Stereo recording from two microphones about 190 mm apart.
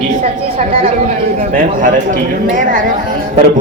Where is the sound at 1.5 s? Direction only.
45° right (ahead or behind).